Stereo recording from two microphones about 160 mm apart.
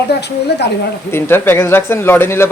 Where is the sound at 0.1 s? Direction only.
90° left.